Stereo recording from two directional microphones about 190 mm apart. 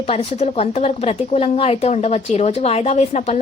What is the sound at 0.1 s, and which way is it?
A woman's voice, 35° left (ahead or behind).